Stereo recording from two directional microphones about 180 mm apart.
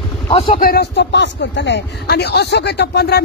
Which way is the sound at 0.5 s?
55° left (ahead or behind).